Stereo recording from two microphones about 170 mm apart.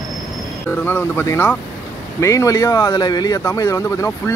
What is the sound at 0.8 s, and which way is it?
A man's voice, 10° left (ahead or behind).